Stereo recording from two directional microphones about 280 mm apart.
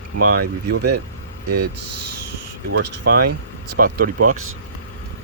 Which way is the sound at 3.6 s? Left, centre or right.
Right.